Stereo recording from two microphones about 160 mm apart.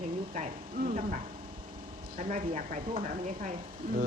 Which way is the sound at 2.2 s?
40° right (ahead or behind).